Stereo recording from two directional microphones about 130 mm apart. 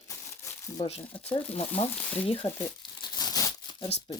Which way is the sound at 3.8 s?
45° left (ahead or behind).